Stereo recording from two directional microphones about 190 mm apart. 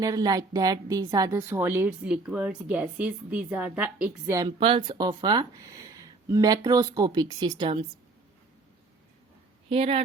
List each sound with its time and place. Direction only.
0.0 s a woman's voice: 20° right (ahead or behind)
4.3 s speech: 20° right (ahead or behind)
9.6 s a woman's voice: 30° right (ahead or behind)